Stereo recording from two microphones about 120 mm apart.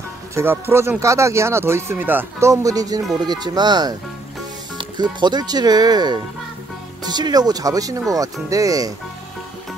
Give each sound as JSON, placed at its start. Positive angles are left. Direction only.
{"t": 0.3, "sound": "speech", "side_deg": -20}
{"t": 2.5, "sound": "speech", "side_deg": -30}